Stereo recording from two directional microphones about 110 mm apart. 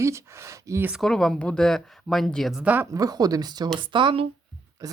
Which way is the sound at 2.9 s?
35° right (ahead or behind).